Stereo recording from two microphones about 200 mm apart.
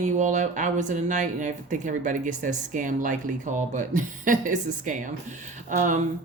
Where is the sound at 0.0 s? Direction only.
35° right (ahead or behind).